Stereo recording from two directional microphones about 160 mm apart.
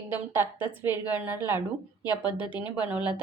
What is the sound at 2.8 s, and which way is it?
Speech, 10° right (ahead or behind).